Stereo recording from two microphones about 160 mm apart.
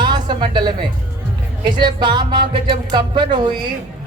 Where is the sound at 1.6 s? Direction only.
30° right (ahead or behind).